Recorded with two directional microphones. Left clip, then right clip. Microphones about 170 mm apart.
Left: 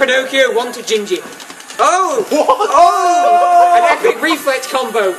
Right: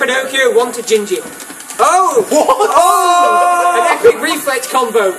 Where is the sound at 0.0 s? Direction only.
35° left (ahead or behind).